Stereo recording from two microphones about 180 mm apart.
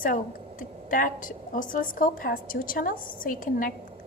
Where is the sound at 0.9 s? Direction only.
50° left (ahead or behind).